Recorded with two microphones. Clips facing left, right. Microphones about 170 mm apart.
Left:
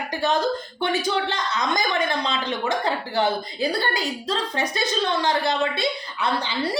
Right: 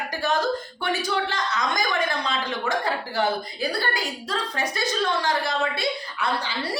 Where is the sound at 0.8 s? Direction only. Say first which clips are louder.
Left 3 dB; 20° left (ahead or behind).